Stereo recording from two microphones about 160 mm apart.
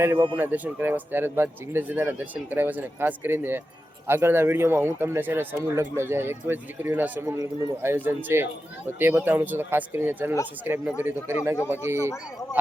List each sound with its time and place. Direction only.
0.0 s a man's voice: 15° right (ahead or behind)